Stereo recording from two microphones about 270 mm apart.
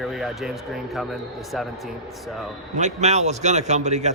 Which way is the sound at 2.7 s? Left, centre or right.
Right.